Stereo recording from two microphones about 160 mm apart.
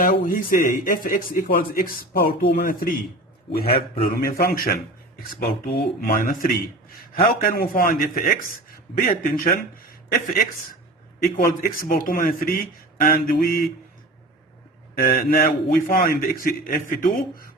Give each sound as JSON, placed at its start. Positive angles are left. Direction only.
{"t": 0.0, "sound": "speech", "side_deg": 60}
{"t": 14.9, "sound": "speech", "side_deg": 70}